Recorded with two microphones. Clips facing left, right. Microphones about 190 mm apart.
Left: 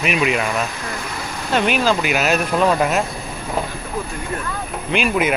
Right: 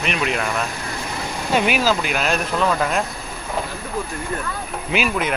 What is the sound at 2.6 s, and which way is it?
Speech, 15° left (ahead or behind).